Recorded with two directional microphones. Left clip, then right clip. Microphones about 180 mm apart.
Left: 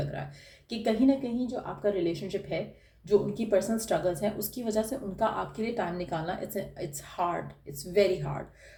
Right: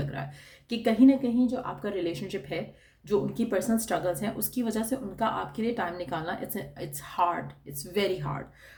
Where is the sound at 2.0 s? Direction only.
50° right (ahead or behind).